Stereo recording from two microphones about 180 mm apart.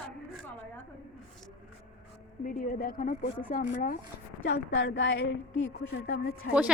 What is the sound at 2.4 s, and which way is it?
Speech, 55° left (ahead or behind).